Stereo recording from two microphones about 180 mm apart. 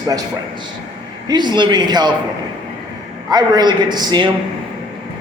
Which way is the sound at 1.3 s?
25° right (ahead or behind).